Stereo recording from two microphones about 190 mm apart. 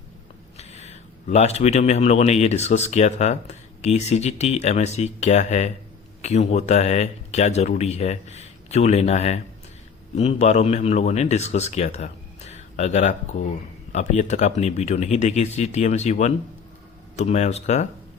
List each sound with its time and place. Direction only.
0.5 s speech: 35° left (ahead or behind)